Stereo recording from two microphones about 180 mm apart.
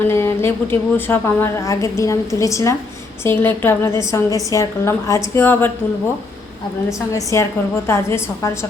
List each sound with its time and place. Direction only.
0.1 s a woman's voice: 15° left (ahead or behind)
7.1 s a woman's voice: 15° left (ahead or behind)